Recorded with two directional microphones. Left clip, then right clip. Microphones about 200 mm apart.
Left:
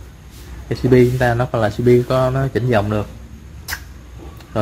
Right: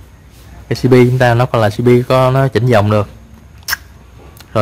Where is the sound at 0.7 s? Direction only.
45° right (ahead or behind).